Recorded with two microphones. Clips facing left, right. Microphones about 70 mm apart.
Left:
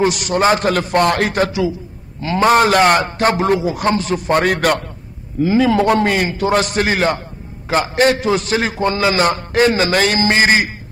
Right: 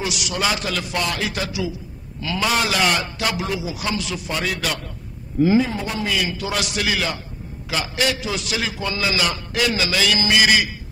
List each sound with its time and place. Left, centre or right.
0.0 s a man's voice: left
5.6 s a man's voice: left